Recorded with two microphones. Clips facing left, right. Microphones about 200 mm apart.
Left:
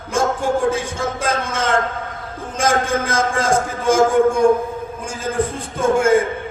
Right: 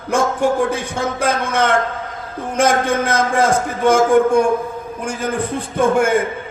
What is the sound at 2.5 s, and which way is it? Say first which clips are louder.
A man's voice: right 3 dB; 65° right (ahead or behind).